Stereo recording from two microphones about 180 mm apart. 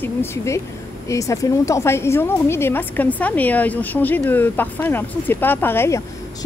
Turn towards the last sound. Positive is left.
turn(degrees=15)  # may be behind; listen again after turning